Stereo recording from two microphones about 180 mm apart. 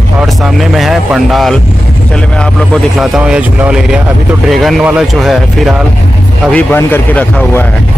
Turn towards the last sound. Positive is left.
turn(degrees=10)  # may be behind; listen again after turning